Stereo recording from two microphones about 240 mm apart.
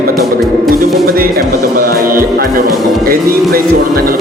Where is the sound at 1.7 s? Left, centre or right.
Right.